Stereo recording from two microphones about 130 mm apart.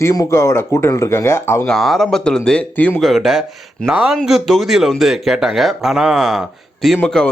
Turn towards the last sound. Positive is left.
turn(degrees=10)  # may be behind; listen again after turning